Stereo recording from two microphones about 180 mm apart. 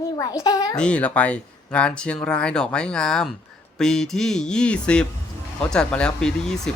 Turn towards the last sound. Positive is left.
turn(degrees=5)  # may be behind; listen again after turning